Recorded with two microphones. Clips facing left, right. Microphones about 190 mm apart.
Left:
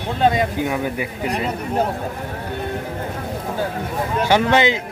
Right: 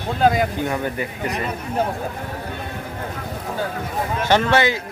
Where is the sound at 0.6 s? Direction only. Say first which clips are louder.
Left 1 dB; 5° left (ahead or behind).